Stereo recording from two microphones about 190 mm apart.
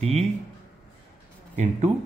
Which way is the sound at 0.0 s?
35° right (ahead or behind).